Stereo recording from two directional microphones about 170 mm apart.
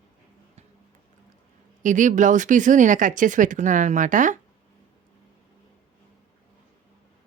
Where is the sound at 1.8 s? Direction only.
50° right (ahead or behind).